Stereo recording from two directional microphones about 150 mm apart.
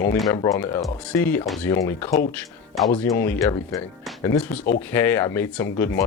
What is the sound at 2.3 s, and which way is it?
Speech, centre (ahead or behind).